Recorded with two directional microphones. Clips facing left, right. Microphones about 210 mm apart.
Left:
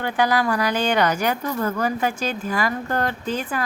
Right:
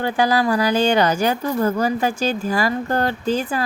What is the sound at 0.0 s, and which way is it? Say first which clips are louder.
Speech: right 2 dB; 30° right (ahead or behind).